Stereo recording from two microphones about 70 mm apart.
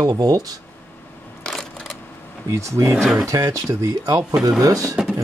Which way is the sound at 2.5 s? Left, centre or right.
Right.